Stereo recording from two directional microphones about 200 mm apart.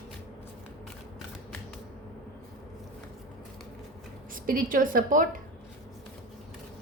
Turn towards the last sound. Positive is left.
turn(degrees=-45)  # may be behind; listen again after turning